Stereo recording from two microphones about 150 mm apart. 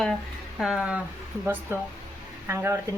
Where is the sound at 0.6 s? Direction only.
Centre (ahead or behind).